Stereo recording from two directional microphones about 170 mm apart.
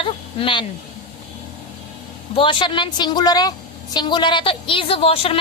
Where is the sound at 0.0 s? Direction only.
30° left (ahead or behind).